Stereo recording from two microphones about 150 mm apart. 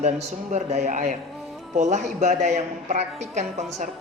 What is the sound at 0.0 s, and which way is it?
A man's voice, 50° right (ahead or behind).